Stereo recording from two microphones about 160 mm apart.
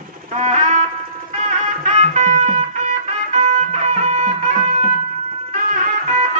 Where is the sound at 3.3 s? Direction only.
45° right (ahead or behind).